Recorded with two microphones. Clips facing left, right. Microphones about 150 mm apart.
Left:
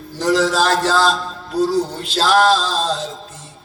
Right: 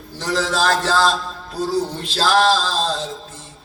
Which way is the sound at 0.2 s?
35° left (ahead or behind).